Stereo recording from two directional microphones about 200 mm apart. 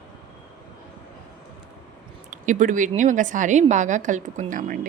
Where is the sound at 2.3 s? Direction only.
40° right (ahead or behind).